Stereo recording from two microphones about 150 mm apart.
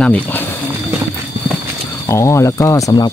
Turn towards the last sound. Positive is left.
turn(degrees=25)  # may be behind; listen again after turning